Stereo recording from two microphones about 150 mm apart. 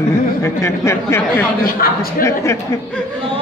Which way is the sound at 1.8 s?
85° left.